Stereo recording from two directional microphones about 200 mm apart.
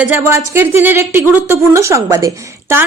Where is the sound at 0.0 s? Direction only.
10° right (ahead or behind).